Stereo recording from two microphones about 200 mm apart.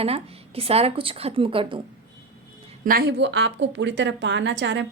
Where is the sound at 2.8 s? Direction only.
45° right (ahead or behind).